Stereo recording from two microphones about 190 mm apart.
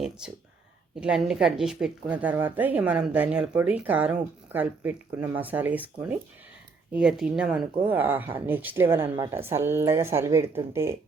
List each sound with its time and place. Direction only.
0.9 s a woman's voice: 5° right (ahead or behind)